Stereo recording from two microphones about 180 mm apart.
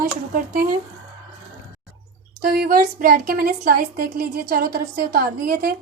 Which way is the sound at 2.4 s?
55° right (ahead or behind).